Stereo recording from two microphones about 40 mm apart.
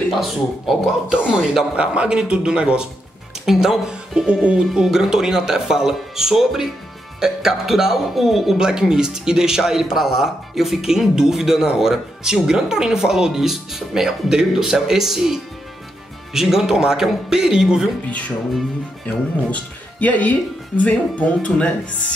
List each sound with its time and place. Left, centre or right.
0.1 s speech: centre
1.0 s speech: right
3.4 s speech: centre
4.3 s speech: right
4.8 s speech: centre
5.1 s speech: centre
8.5 s speech: centre
19.0 s speech: left